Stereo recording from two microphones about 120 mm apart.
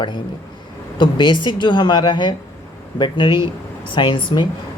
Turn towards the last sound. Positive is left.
turn(degrees=40)  # may be behind; listen again after turning